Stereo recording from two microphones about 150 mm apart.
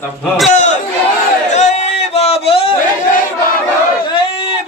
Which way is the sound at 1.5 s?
50° left (ahead or behind).